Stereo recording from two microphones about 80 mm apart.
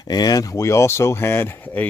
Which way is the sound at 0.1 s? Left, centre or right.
Left.